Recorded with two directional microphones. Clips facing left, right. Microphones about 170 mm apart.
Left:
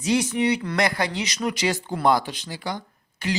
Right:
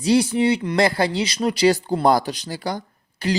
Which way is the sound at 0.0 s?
35° right (ahead or behind).